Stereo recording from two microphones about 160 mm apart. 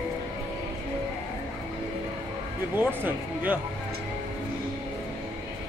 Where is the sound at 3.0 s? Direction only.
10° right (ahead or behind).